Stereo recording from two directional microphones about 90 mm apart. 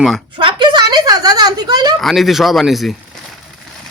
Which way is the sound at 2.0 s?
Centre (ahead or behind).